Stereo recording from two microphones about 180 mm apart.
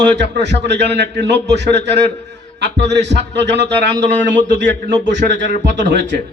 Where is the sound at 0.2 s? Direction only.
70° right (ahead or behind).